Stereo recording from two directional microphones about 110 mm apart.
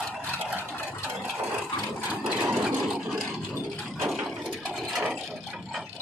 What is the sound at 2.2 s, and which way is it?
Vehicle, 5° right (ahead or behind).